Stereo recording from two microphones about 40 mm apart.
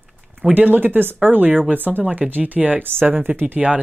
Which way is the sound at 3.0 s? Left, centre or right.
Right.